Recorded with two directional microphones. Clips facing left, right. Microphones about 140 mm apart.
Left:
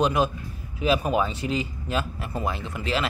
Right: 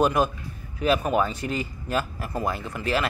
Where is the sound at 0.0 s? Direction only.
Centre (ahead or behind).